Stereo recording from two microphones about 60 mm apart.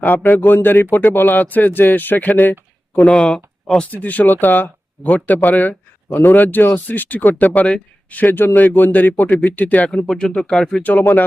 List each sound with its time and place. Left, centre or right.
0.0 s speech: left
3.1 s speech: centre
3.9 s speech: left; by 10.8 s centre